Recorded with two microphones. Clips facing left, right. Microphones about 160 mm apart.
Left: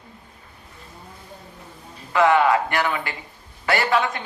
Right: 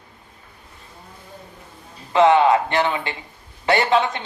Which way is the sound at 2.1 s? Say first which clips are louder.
Right 3 dB; 20° right (ahead or behind).